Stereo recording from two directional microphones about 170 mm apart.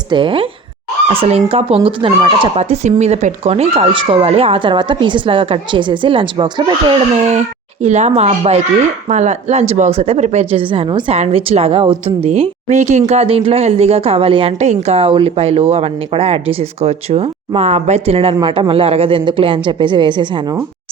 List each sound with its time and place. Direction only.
0.1 s a woman's voice: 30° right (ahead or behind)
7.2 s a woman's voice: 40° right (ahead or behind)